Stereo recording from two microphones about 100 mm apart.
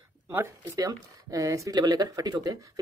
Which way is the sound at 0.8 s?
35° right (ahead or behind).